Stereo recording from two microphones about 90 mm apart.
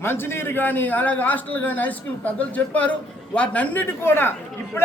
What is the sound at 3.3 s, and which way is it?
A man's voice, 15° left (ahead or behind).